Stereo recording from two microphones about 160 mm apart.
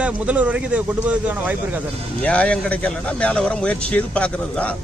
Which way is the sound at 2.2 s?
10° left (ahead or behind).